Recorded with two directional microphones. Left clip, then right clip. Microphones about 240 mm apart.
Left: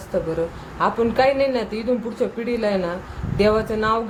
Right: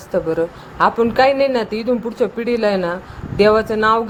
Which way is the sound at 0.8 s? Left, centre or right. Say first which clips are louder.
Right 5 dB; right.